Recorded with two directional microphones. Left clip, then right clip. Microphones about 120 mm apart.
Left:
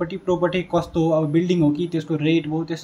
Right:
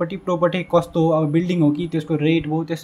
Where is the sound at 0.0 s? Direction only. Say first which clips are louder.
Right 2 dB; 50° right (ahead or behind).